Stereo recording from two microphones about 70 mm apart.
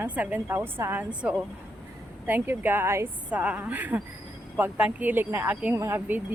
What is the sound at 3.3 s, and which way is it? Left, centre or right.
Speech, right.